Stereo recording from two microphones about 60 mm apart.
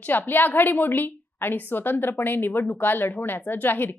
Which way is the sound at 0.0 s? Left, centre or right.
Left.